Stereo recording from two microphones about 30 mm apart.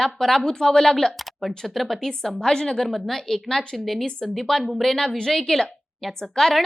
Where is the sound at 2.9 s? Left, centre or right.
Centre.